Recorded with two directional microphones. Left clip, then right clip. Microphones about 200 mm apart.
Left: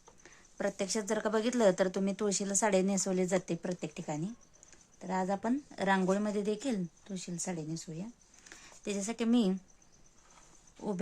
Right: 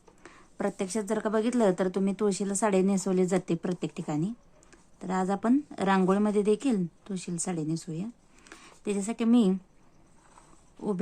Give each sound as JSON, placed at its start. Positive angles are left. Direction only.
{"t": 0.5, "sound": "a woman's voice", "side_deg": 0}
{"t": 8.4, "sound": "speech", "side_deg": -5}
{"t": 10.8, "sound": "a sound", "side_deg": 0}